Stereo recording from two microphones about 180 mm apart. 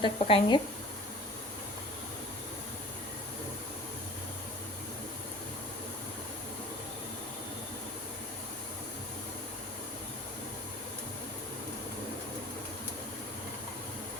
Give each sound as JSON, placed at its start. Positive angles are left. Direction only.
{"t": 0.0, "sound": "speech", "side_deg": 25}